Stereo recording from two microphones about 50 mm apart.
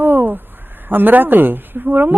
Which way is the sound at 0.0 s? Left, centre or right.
Right.